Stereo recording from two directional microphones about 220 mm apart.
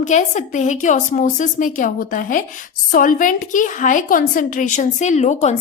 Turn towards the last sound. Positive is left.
turn(degrees=30)  # may be behind; listen again after turning